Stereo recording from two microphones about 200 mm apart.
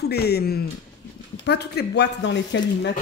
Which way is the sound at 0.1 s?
55° left (ahead or behind).